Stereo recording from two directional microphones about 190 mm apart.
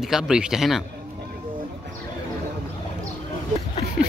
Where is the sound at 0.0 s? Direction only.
5° right (ahead or behind).